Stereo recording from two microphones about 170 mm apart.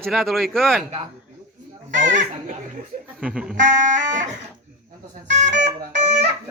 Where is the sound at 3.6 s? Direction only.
50° right (ahead or behind).